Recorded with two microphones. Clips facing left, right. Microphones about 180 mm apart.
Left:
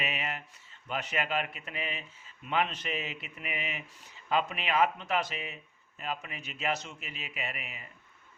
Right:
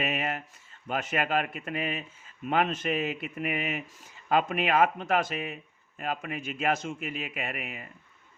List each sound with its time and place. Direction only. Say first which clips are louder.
0.0 s speech: right 6 dB; 50° right (ahead or behind)